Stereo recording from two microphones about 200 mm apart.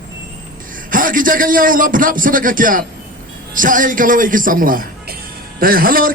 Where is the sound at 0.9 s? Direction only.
45° right (ahead or behind).